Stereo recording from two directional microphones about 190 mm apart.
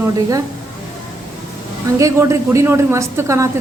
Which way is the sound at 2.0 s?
15° right (ahead or behind).